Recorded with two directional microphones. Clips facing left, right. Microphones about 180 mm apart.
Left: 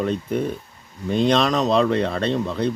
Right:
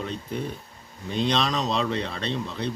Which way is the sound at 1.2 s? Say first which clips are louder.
Left 6 dB; 50° left (ahead or behind).